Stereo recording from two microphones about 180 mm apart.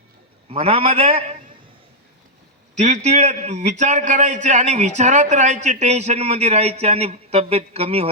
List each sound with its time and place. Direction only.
0.4 s a man's voice: 35° right (ahead or behind)
2.7 s a man's voice: 40° right (ahead or behind)